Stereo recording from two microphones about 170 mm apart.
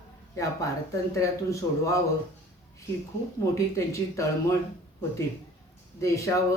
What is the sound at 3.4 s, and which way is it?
Speech, 20° left (ahead or behind).